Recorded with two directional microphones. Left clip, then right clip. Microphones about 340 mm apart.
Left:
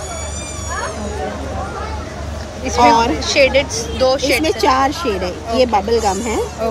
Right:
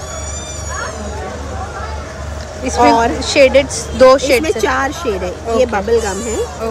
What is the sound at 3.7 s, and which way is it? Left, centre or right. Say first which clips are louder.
Speech: right 7 dB; centre.